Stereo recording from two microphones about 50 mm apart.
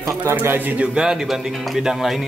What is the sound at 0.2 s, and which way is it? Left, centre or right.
Speech, right.